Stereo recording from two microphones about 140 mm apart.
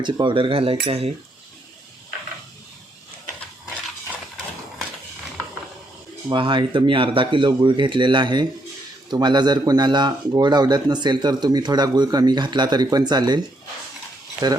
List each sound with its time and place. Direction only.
0.0 s speech: 35° right (ahead or behind)
6.2 s speech: 35° right (ahead or behind)
14.4 s speech: 30° right (ahead or behind)